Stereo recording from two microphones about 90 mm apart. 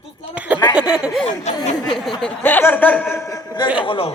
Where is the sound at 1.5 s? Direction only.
50° left (ahead or behind).